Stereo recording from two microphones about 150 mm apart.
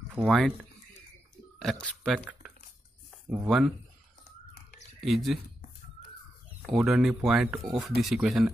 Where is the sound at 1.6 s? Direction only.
5° left (ahead or behind).